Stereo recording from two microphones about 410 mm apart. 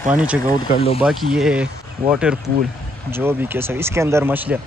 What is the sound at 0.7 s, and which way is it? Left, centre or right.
Speech, centre.